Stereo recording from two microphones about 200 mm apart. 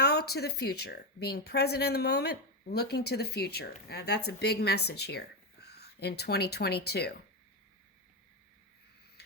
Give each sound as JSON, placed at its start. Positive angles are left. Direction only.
{"t": 0.0, "sound": "a woman's voice", "side_deg": 55}